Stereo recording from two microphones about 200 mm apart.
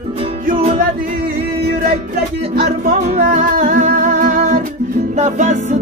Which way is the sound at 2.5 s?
50° right (ahead or behind).